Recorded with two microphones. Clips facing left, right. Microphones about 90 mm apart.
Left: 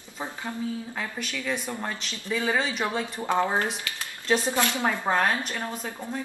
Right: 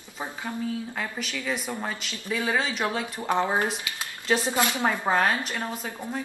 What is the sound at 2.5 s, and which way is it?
Speech, centre (ahead or behind).